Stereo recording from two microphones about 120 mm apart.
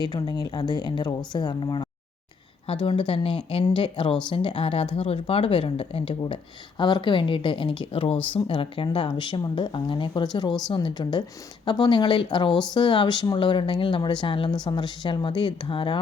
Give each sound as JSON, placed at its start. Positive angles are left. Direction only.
{"t": 0.0, "sound": "speech", "side_deg": 35}
{"t": 2.8, "sound": "speech", "side_deg": 45}